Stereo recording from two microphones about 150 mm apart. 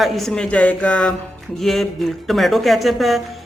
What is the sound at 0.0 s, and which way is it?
Speech, centre (ahead or behind).